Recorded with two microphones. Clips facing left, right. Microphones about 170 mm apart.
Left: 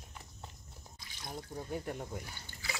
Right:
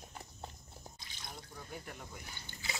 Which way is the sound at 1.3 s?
40° left (ahead or behind).